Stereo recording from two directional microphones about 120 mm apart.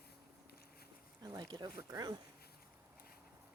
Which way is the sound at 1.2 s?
35° right (ahead or behind).